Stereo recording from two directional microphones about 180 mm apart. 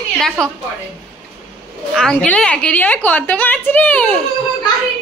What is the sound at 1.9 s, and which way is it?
A woman's voice, 5° left (ahead or behind).